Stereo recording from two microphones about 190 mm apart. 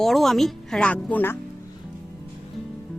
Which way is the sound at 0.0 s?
Centre (ahead or behind).